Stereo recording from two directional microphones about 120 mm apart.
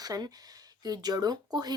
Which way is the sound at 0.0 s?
30° right (ahead or behind).